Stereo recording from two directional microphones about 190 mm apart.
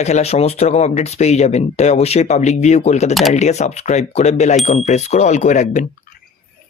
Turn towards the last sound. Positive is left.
turn(degrees=40)  # may be behind; listen again after turning